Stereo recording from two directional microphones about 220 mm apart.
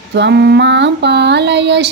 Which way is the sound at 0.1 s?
50° right (ahead or behind).